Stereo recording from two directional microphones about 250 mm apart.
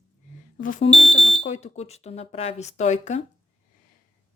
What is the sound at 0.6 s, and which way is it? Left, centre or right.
Speech, left.